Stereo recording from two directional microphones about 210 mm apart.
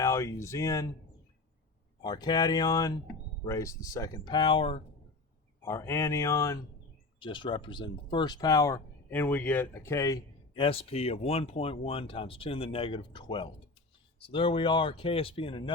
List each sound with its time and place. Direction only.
0.0 s speech: 15° left (ahead or behind)
2.0 s speech: 20° left (ahead or behind)
5.6 s speech: 10° left (ahead or behind)